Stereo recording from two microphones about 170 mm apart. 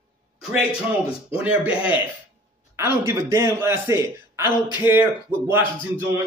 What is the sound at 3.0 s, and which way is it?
Speech, 15° right (ahead or behind).